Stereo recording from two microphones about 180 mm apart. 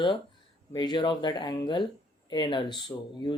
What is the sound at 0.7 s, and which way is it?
Speech, 25° left (ahead or behind).